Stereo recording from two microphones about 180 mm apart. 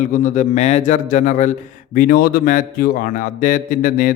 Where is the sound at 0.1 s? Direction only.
45° left (ahead or behind).